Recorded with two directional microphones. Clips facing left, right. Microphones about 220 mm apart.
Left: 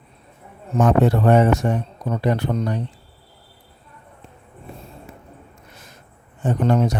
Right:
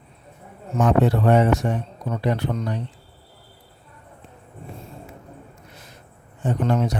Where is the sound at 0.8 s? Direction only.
45° left (ahead or behind).